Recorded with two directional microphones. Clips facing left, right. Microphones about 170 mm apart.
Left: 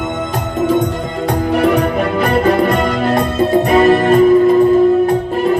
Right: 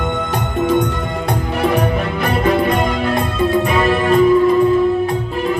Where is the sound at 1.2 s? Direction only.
70° left (ahead or behind); by 4.6 s 45° left (ahead or behind).